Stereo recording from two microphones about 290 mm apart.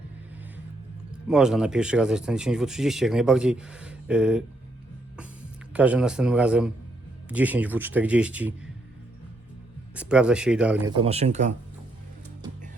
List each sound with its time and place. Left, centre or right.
1.1 s speech: centre
5.7 s speech: centre
9.9 s speech: centre
10.9 s speech: right